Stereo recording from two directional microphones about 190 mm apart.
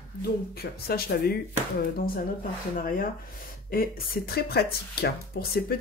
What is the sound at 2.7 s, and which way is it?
Speech, 50° left (ahead or behind).